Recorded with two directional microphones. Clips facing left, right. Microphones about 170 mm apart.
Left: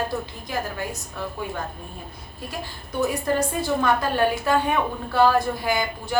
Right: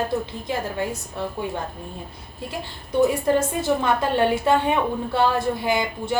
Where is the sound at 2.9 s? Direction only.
20° right (ahead or behind).